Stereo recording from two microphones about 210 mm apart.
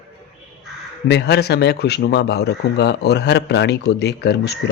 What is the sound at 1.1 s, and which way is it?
Speech, 55° left (ahead or behind).